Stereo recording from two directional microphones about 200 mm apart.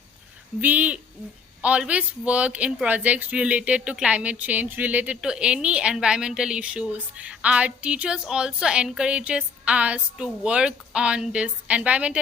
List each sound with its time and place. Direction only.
0.6 s speech: 10° right (ahead or behind)